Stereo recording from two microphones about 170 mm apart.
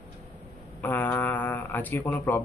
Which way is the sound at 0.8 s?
10° left (ahead or behind).